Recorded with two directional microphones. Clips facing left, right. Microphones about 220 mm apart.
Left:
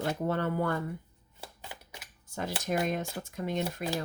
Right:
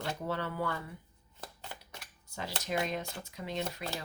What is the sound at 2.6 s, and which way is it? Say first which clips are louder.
Speech: left 3 dB; 50° left (ahead or behind).